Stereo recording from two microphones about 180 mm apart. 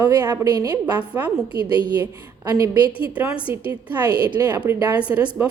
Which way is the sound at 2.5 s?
15° right (ahead or behind).